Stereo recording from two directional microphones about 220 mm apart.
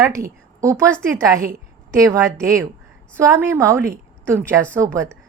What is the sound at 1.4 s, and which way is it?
Speech, 40° right (ahead or behind).